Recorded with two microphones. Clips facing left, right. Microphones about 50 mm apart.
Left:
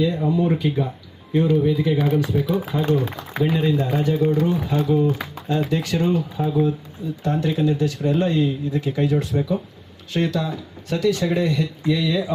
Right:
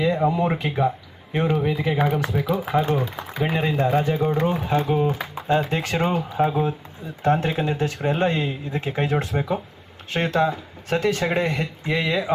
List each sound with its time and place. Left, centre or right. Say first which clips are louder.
0.0 s speech: even; right
5.0 s speech: even; right